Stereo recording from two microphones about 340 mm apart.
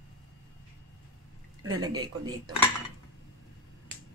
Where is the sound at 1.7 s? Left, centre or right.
Centre.